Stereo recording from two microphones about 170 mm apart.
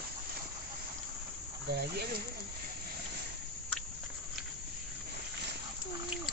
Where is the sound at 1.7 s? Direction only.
75° right (ahead or behind).